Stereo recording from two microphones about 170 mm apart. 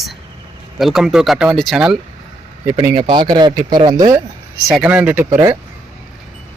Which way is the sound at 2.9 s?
25° right (ahead or behind).